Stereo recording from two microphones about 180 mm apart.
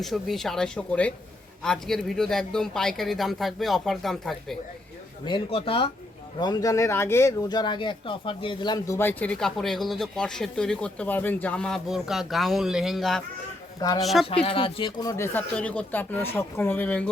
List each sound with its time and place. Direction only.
0.0 s speech: centre (ahead or behind)
5.2 s speech: 30° left (ahead or behind); by 14.3 s centre (ahead or behind)
14.3 s speech: 30° left (ahead or behind); by 17.1 s 5° left (ahead or behind)